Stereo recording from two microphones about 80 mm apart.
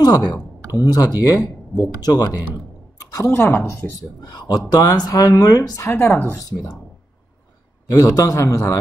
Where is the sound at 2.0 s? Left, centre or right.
Left.